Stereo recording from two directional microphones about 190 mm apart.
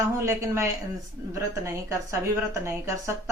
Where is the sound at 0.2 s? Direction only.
15° right (ahead or behind).